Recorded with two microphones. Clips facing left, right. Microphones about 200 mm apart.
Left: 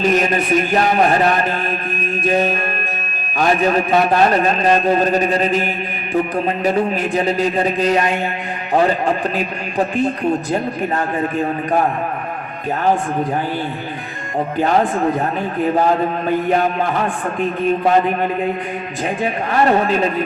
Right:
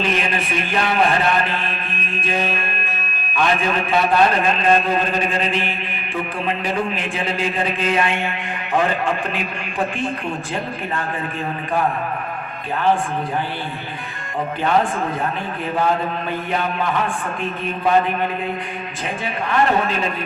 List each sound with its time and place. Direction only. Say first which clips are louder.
0.0 s a man's voice: left 6 dB; 40° left (ahead or behind)
15.6 s a man's voice: left 4 dB; 40° left (ahead or behind)
19.2 s a man's voice: left 3 dB; 40° left (ahead or behind)